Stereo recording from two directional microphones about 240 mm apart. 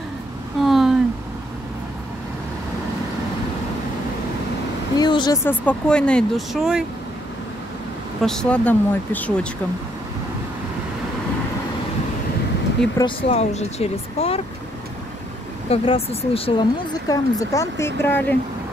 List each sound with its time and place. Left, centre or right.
0.7 s a sound: centre
4.9 s speech: centre
8.2 s speech: centre
12.9 s speech: left
15.7 s speech: left